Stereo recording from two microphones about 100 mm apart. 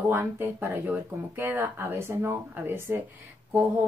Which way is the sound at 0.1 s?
20° right (ahead or behind).